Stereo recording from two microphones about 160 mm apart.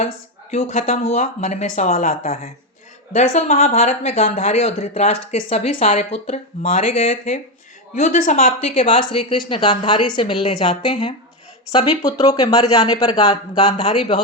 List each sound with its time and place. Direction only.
0.5 s speech: 40° left (ahead or behind); by 2.5 s 65° left (ahead or behind)
3.1 s speech: 45° left (ahead or behind)
7.9 s speech: 50° left (ahead or behind)
8.6 s speech: 40° left (ahead or behind)